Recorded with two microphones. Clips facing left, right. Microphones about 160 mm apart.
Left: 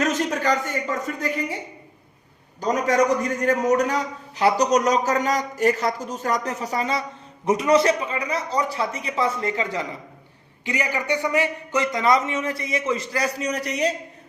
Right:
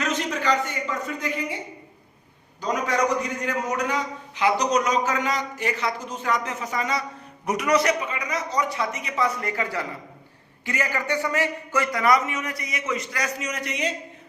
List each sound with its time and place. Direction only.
0.0 s speech: 45° left (ahead or behind)
2.6 s a man's voice: 45° left (ahead or behind)